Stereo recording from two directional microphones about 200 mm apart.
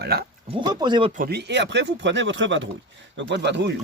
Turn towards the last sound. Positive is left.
turn(degrees=-60)  # may be behind; listen again after turning